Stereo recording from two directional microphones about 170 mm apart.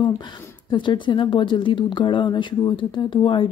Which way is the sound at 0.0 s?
25° left (ahead or behind).